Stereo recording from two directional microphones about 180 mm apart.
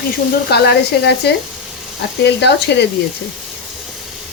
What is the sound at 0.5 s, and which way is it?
Speech, 65° left (ahead or behind).